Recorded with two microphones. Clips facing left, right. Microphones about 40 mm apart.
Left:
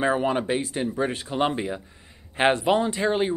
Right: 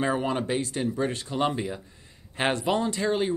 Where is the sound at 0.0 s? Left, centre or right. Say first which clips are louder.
Left 3 dB; centre.